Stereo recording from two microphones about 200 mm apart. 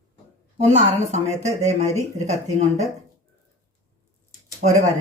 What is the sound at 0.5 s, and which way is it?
A woman's voice, 30° right (ahead or behind).